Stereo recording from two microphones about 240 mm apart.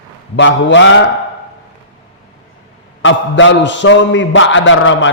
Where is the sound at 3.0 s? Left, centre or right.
Left.